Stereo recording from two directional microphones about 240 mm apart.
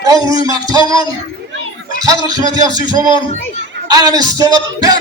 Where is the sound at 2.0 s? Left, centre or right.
Centre.